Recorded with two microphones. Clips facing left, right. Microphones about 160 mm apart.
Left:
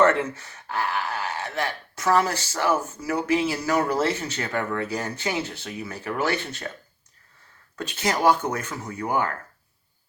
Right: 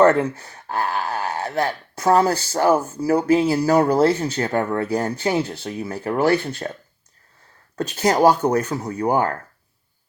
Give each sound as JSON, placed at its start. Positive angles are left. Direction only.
{"t": 0.0, "sound": "speech", "side_deg": -35}
{"t": 7.8, "sound": "speech", "side_deg": -40}